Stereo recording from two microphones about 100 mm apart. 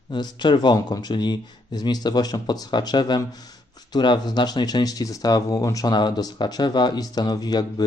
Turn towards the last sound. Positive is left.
turn(degrees=40)  # may be behind; listen again after turning